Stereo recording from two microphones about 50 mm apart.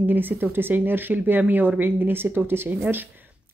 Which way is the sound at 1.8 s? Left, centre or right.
Right.